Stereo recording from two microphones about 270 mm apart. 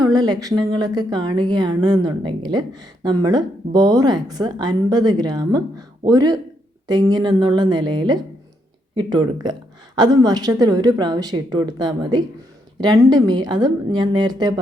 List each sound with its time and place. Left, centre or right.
0.0 s a woman's voice: centre